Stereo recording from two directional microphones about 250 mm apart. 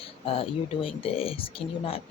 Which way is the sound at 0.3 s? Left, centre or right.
Left.